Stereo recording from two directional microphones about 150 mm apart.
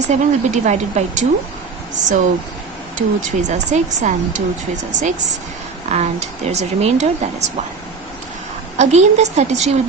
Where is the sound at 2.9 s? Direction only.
50° right (ahead or behind).